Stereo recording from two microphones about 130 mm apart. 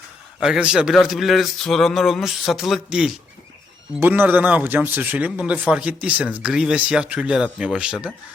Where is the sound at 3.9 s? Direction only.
15° right (ahead or behind).